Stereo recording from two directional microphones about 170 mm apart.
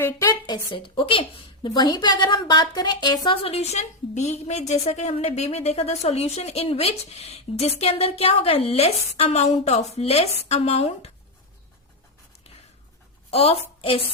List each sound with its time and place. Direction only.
0.0 s a woman's voice: 15° left (ahead or behind); by 11.1 s 40° left (ahead or behind)
13.3 s a woman's voice: 35° left (ahead or behind)